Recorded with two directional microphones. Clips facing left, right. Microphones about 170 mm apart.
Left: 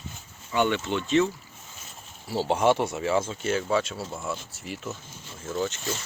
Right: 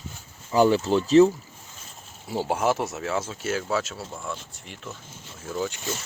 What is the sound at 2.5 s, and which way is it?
Speech, 5° right (ahead or behind).